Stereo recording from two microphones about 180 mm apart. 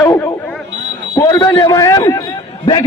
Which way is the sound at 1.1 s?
20° left (ahead or behind).